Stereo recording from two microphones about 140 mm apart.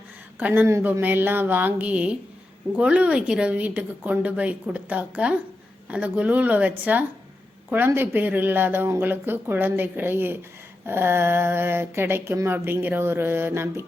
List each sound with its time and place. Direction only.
0.3 s speech: 15° right (ahead or behind)